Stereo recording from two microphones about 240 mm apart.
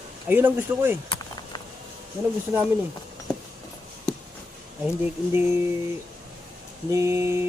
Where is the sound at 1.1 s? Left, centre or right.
Centre.